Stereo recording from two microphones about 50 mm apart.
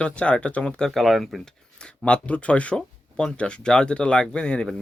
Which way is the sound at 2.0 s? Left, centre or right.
Left.